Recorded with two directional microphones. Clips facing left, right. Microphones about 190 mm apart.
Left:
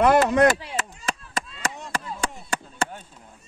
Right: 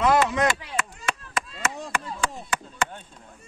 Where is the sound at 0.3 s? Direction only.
55° left (ahead or behind).